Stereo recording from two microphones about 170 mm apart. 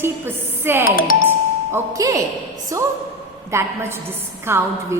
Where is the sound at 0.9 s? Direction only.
55° left (ahead or behind).